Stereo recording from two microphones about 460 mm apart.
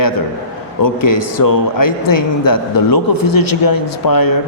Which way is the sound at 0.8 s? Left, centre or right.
Left.